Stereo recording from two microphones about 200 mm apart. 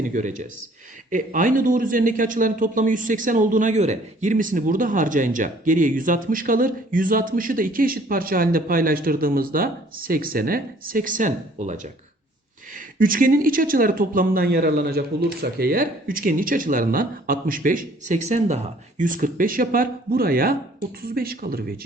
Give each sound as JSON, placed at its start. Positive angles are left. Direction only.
{"t": 0.0, "sound": "speech", "side_deg": -40}